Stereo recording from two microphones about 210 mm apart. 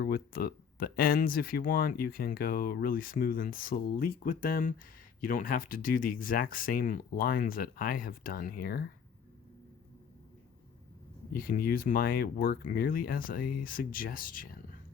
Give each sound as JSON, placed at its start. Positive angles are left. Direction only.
{"t": 0.0, "sound": "speech", "side_deg": 45}
{"t": 11.3, "sound": "speech", "side_deg": 45}